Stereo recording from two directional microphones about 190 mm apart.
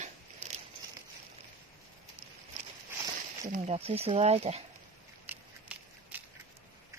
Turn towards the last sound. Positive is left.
turn(degrees=-10)  # may be behind; listen again after turning